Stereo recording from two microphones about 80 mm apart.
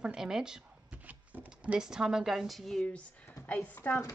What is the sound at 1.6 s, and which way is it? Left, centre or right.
A woman's voice, centre.